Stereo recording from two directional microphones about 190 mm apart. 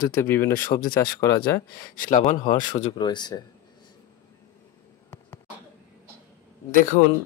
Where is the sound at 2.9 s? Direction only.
25° left (ahead or behind).